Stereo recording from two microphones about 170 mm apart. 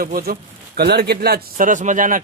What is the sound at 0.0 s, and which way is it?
Speech, 60° right (ahead or behind).